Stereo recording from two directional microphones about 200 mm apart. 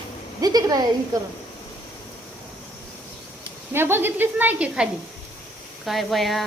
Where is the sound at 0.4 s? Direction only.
20° right (ahead or behind).